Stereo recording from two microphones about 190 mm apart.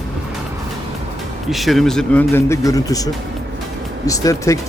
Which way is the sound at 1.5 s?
Centre (ahead or behind).